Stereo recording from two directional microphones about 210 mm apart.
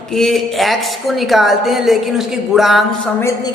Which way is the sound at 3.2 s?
15° left (ahead or behind).